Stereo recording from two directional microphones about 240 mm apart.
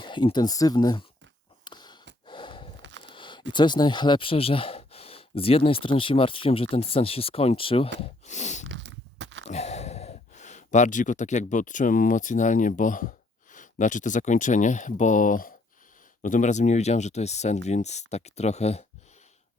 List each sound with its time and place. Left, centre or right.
0.0 s speech: centre
1.6 s a sound: centre
2.2 s snort: centre
3.0 s speech: centre
8.6 s a sound: right
9.5 s speech: left